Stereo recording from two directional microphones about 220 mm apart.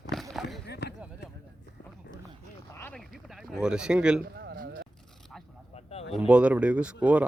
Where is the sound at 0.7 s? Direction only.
50° left (ahead or behind).